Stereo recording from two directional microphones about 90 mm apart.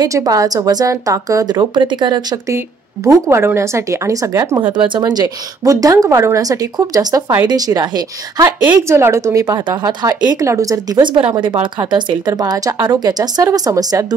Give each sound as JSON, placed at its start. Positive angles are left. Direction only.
{"t": 0.0, "sound": "a woman's voice", "side_deg": -40}
{"t": 3.1, "sound": "a woman's voice", "side_deg": -30}
{"t": 4.7, "sound": "a woman's voice", "side_deg": -60}
{"t": 8.8, "sound": "a woman's voice", "side_deg": -30}
{"t": 11.3, "sound": "speech", "side_deg": -60}
{"t": 11.9, "sound": "a woman's voice", "side_deg": -45}